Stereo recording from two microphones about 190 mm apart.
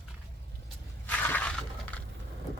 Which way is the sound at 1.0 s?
10° left (ahead or behind).